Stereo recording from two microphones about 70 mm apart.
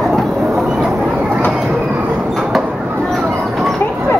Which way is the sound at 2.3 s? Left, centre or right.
Centre.